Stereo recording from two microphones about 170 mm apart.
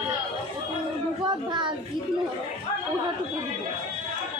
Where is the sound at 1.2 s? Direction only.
25° right (ahead or behind).